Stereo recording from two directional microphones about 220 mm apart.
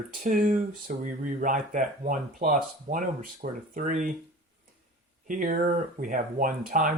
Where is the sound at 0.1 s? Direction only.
35° right (ahead or behind).